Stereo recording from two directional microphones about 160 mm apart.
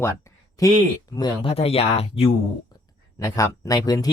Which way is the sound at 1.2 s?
35° left (ahead or behind).